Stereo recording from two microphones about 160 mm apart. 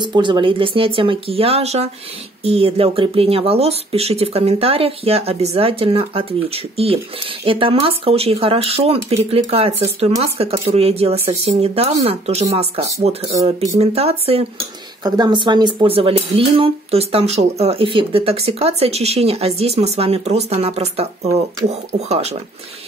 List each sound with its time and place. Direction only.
0.0 s speech: 30° right (ahead or behind)
15.0 s speech: 25° right (ahead or behind); by 22.4 s 40° right (ahead or behind)